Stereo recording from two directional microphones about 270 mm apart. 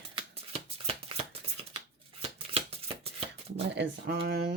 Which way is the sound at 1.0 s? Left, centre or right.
Right.